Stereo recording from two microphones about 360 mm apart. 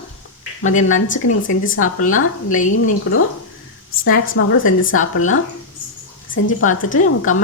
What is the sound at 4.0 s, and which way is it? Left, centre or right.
Speech, left.